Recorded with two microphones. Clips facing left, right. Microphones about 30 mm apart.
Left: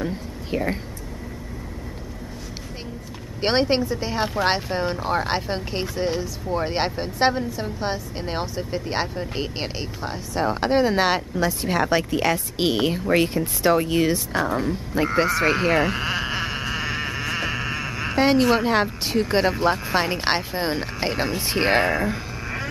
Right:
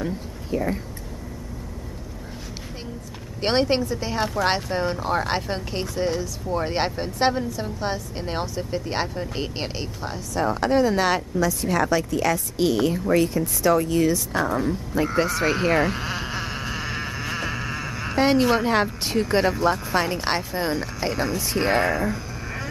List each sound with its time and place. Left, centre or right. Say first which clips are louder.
3.3 s speech: left 1 dB; centre
10.1 s speech: even; left
14.3 s speech: even; centre
16.0 s sheep: left 4 dB; left
21.8 s a sound: left 1 dB; left